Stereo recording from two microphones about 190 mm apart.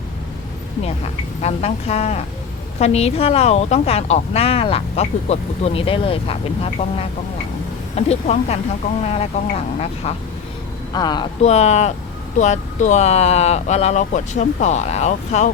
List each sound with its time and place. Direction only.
1.4 s speech: 35° left (ahead or behind)
7.9 s speech: 35° left (ahead or behind)
10.9 s speech: 20° left (ahead or behind)
11.4 s speech: 35° left (ahead or behind)